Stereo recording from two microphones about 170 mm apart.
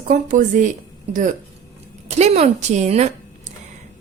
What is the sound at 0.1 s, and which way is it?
A woman's voice, 50° right (ahead or behind).